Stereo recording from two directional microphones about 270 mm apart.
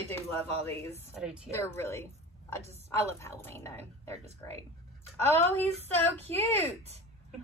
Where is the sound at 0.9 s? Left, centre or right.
Centre.